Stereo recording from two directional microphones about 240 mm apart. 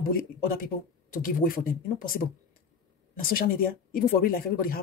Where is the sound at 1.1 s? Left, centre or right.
Left.